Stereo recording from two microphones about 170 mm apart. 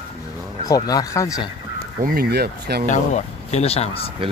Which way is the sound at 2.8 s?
45° left (ahead or behind).